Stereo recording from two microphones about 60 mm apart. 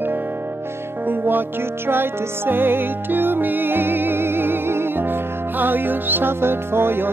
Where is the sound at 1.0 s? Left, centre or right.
Right.